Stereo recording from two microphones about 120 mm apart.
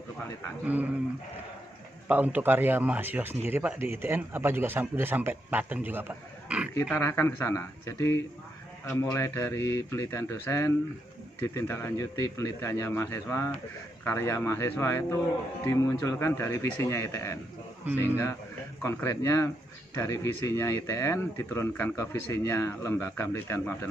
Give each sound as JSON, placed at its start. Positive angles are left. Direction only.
{"t": 2.0, "sound": "speech", "side_deg": -15}
{"t": 7.0, "sound": "speech", "side_deg": 20}
{"t": 18.8, "sound": "speech", "side_deg": 25}